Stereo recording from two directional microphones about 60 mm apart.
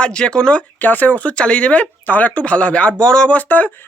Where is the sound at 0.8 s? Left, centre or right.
Left; by 3.4 s centre.